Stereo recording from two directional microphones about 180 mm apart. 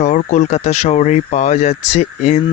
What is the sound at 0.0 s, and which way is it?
Speech, 40° left (ahead or behind).